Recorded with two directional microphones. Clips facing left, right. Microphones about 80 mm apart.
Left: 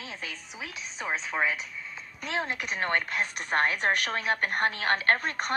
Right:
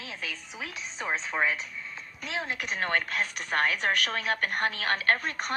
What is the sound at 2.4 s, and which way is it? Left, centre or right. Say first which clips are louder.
A woman's voice: right 1 dB; left.